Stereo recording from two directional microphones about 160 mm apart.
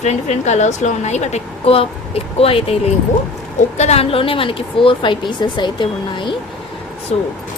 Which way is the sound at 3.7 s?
45° left (ahead or behind).